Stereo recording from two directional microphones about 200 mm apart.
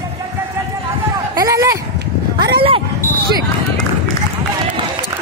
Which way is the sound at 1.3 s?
15° right (ahead or behind).